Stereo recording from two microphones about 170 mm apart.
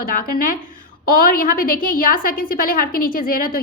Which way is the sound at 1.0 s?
55° left (ahead or behind).